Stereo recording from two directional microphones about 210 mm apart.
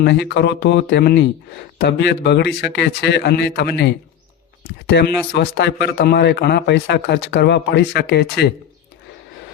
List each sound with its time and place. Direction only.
0.0 s speech: 50° left (ahead or behind)